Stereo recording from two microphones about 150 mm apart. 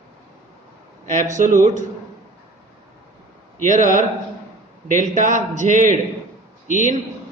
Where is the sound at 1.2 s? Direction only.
55° right (ahead or behind).